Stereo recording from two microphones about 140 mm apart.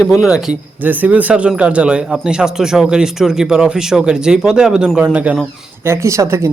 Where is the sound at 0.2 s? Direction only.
5° right (ahead or behind).